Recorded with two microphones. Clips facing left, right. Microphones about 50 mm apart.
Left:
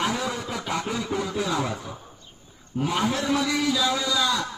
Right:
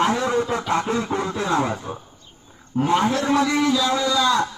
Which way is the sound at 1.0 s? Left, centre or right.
Right.